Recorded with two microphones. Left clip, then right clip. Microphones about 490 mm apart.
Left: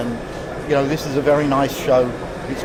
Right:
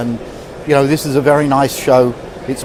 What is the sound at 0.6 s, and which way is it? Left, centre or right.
Speech, right.